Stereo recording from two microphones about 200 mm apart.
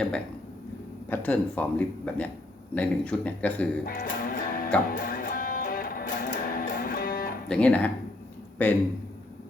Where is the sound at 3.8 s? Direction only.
45° left (ahead or behind).